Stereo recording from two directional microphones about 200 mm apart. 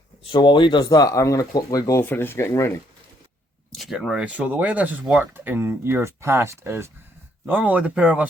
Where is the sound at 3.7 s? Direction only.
Centre (ahead or behind).